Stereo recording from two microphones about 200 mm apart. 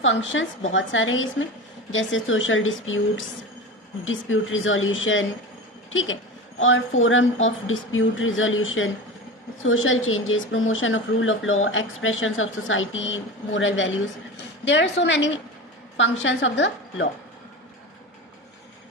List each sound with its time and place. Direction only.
0.0 s a woman's voice: 70° left (ahead or behind)